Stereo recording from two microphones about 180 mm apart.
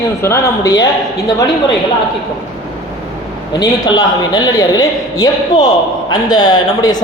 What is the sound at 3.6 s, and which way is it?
A man's voice, 20° left (ahead or behind).